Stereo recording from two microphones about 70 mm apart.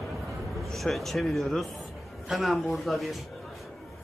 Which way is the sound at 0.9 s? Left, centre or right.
Centre.